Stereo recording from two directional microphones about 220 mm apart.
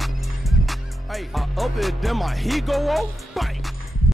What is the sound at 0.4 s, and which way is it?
Speech, centre (ahead or behind).